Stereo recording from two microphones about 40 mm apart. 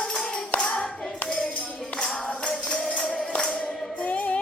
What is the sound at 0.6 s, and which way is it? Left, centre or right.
Singing, left.